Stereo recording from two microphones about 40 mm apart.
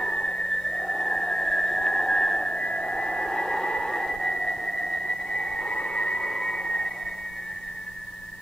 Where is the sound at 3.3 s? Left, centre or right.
Centre.